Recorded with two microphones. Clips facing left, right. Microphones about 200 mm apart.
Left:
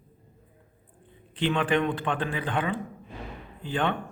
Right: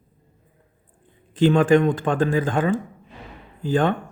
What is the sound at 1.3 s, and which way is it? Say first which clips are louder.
A man's voice: right 9 dB; 45° right (ahead or behind).